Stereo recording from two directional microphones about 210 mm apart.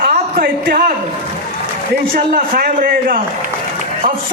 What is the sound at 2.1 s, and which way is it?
A man's voice, 45° right (ahead or behind).